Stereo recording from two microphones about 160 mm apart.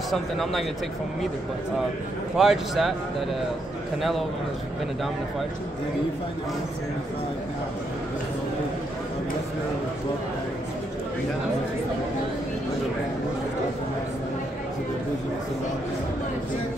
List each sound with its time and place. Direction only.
0.1 s speech: centre (ahead or behind)
2.3 s speech: centre (ahead or behind)